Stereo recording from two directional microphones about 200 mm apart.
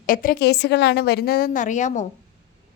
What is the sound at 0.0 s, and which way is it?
A woman's voice, 45° left (ahead or behind).